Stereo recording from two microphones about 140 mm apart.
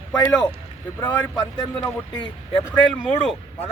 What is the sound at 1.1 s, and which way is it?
Speech, 30° left (ahead or behind).